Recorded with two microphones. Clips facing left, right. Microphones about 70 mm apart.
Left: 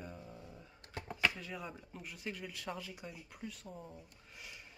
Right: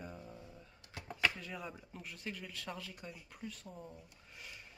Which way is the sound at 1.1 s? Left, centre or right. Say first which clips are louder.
Even; centre.